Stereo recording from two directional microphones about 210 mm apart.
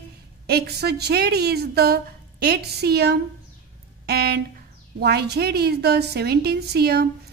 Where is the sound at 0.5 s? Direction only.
50° right (ahead or behind).